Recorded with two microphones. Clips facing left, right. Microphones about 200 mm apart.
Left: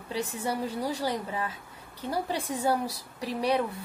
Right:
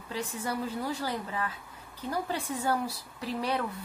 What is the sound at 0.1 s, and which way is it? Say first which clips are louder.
A woman's voice: left 3 dB; 10° left (ahead or behind).